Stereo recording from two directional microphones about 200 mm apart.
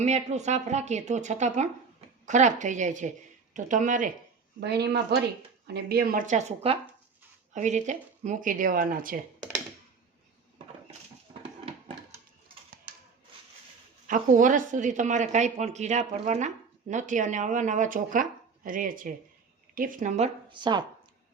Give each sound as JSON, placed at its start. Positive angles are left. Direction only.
{"t": 0.0, "sound": "speech", "side_deg": -35}
{"t": 4.6, "sound": "a woman's voice", "side_deg": -55}
{"t": 14.1, "sound": "speech", "side_deg": -40}